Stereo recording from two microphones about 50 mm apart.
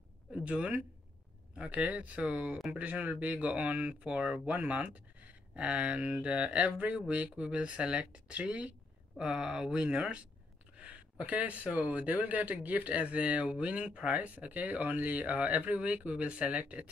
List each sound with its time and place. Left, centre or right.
0.4 s speech: right